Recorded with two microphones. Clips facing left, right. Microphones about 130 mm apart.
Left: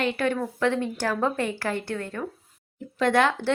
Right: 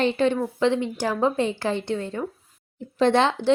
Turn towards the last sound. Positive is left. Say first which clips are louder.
# right 2 dB
turn(degrees=-25)  # may be behind; listen again after turning